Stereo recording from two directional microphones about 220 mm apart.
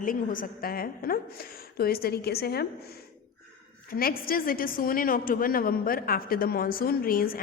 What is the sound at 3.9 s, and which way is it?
A woman's voice, 40° left (ahead or behind).